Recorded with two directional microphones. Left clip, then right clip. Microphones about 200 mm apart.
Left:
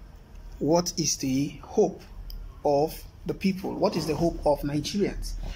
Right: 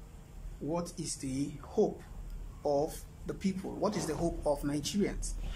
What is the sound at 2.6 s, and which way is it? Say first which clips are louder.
Speech: left 8 dB; centre (ahead or behind).